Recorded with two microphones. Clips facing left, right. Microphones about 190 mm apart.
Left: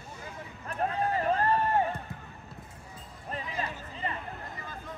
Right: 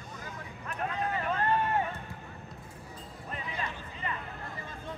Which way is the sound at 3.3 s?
35° left (ahead or behind).